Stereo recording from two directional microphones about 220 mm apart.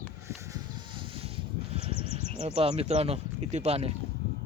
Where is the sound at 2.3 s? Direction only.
25° right (ahead or behind).